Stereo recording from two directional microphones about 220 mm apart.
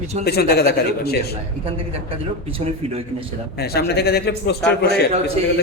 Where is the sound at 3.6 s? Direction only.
45° left (ahead or behind).